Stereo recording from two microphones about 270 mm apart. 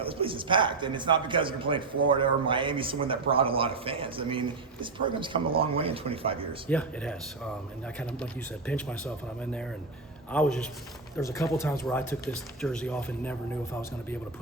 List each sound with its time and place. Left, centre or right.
0.0 s a man's voice: centre
6.7 s speech: centre